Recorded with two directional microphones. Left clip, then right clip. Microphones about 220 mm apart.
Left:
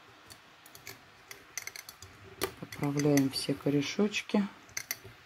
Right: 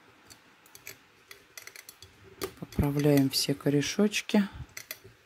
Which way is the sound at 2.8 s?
30° right (ahead or behind).